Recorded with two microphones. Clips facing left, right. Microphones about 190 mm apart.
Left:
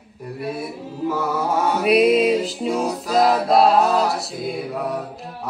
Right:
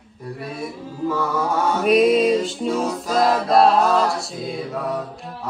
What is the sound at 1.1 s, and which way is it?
Mantra, 5° left (ahead or behind).